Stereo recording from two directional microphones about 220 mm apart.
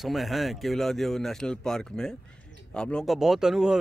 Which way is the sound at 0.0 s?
Centre (ahead or behind).